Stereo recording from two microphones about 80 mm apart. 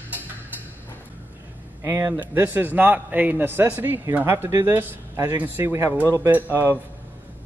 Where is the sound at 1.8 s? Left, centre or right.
Right.